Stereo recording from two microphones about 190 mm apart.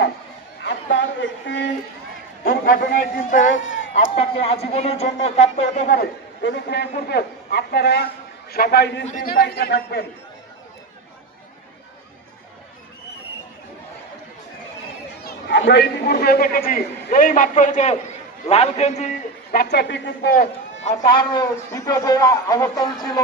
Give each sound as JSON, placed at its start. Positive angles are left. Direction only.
{"t": 0.6, "sound": "a sound", "side_deg": 70}
{"t": 2.4, "sound": "a man's voice", "side_deg": 50}
{"t": 3.5, "sound": "a sound", "side_deg": 75}
{"t": 3.9, "sound": "speech", "side_deg": 35}
{"t": 6.4, "sound": "a man's voice", "side_deg": 65}
{"t": 9.0, "sound": "a man's voice", "side_deg": 50}
{"t": 15.2, "sound": "a man's voice", "side_deg": 65}
{"t": 19.5, "sound": "a man's voice", "side_deg": 60}
{"t": 21.0, "sound": "a man's voice", "side_deg": 25}